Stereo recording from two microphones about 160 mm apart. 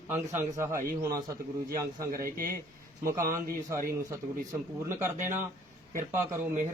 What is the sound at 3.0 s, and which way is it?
A man's voice, 20° right (ahead or behind).